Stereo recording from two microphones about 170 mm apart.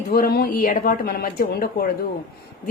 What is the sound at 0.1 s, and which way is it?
A woman's voice, 60° left (ahead or behind).